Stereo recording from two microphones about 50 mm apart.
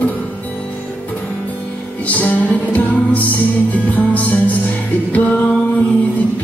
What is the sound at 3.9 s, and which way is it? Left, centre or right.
Music, left.